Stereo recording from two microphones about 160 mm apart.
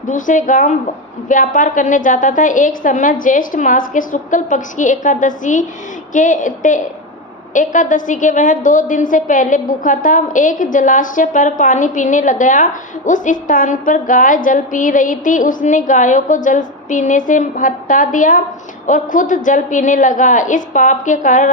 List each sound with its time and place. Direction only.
0.1 s a woman's voice: 55° left (ahead or behind)